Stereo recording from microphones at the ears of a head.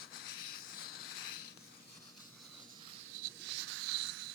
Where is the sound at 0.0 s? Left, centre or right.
Left.